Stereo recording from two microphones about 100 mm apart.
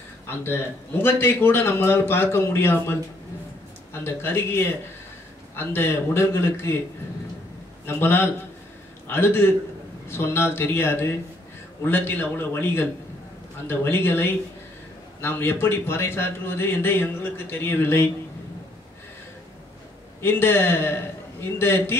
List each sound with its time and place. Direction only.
1.0 s a man's voice: 25° left (ahead or behind)
7.8 s a man's voice: 25° left (ahead or behind)
20.2 s a man's voice: 25° left (ahead or behind)